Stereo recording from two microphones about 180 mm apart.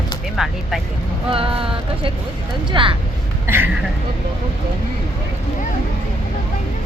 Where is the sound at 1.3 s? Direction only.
30° right (ahead or behind).